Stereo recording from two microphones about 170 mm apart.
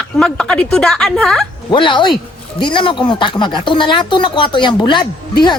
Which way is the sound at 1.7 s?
30° left (ahead or behind).